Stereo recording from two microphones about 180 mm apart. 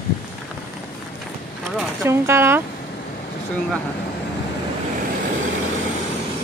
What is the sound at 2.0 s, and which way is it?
Speech, 15° right (ahead or behind).